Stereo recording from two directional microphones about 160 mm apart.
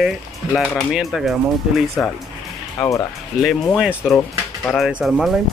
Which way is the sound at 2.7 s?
20° left (ahead or behind).